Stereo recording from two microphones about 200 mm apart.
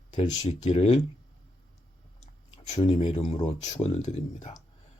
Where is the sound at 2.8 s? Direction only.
30° left (ahead or behind).